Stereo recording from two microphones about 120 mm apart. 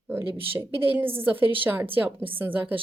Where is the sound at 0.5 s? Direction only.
20° right (ahead or behind).